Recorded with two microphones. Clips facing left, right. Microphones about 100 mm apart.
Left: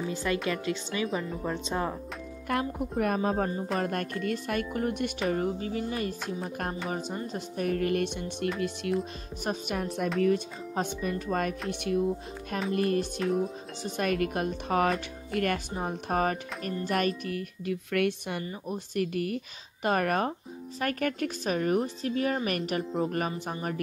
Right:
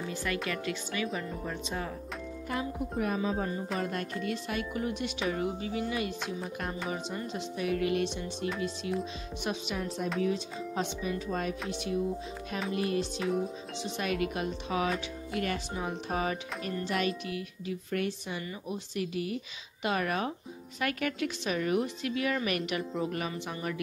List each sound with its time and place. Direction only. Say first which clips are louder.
0.1 s speech: left 3 dB; 20° left (ahead or behind)
2.6 s speech: left 3 dB; 55° left (ahead or behind)
9.4 s speech: left 3 dB; 50° left (ahead or behind)
17.9 s speech: left 5 dB; 60° left (ahead or behind)
18.4 s a woman's voice: left 2 dB; 35° left (ahead or behind)
18.9 s a woman's voice: left 4 dB; 50° left (ahead or behind)